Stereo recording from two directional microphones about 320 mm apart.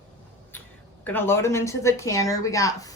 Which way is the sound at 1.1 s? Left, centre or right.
Centre.